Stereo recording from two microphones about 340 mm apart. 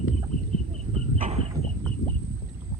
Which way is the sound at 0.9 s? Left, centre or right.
Centre.